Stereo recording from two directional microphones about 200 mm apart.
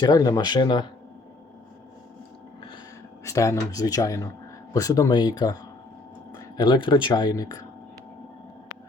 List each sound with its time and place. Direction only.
0.0 s speech: 20° left (ahead or behind)
3.2 s speech: 15° left (ahead or behind)